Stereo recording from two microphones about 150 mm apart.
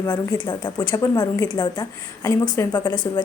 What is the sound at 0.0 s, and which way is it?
A woman's voice, 20° left (ahead or behind).